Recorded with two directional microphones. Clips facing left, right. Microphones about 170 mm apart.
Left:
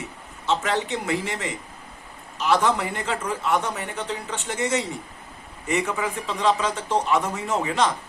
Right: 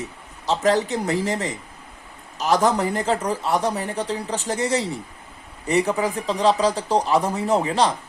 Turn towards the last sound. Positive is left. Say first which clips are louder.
# right 4 dB
turn(degrees=-35)  # may be behind; listen again after turning